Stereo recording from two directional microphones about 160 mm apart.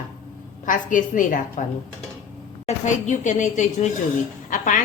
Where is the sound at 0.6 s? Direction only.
55° left (ahead or behind).